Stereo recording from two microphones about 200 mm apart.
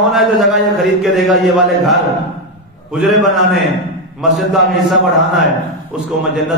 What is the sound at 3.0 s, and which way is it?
A man's voice, centre (ahead or behind).